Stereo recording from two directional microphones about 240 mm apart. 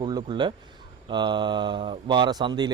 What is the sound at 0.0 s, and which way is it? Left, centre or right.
Speech, centre.